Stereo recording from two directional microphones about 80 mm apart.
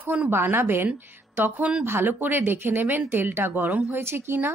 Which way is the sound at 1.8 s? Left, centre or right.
Right.